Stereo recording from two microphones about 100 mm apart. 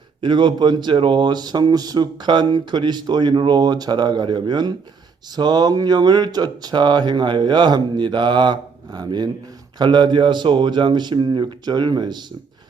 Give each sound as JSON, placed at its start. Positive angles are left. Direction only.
{"t": 0.2, "sound": "speech", "side_deg": -50}